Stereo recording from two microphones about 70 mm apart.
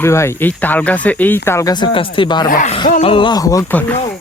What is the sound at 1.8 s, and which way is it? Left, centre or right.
Speech, left.